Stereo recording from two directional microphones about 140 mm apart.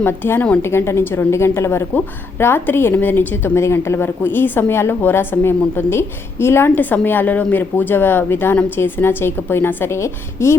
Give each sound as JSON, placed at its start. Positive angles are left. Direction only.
{"t": 0.0, "sound": "a woman's voice", "side_deg": 15}